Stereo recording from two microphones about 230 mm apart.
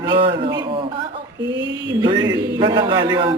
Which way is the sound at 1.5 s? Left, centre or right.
Right.